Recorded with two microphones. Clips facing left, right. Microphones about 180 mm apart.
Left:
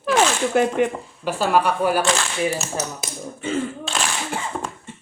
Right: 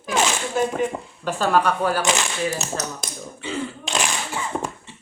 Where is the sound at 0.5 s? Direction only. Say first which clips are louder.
Left 3 dB; 65° left (ahead or behind).